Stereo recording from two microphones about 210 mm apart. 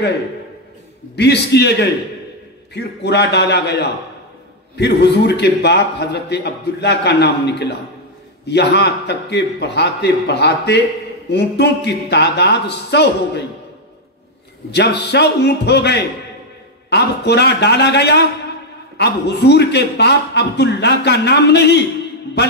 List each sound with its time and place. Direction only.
1.1 s a man's voice: 55° left (ahead or behind)
14.7 s a man's voice: 55° left (ahead or behind)